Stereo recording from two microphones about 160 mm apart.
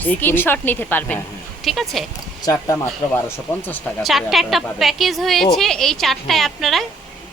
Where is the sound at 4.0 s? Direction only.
Centre (ahead or behind).